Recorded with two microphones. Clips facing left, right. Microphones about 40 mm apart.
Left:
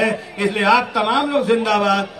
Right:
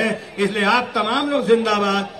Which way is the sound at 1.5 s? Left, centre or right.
Centre.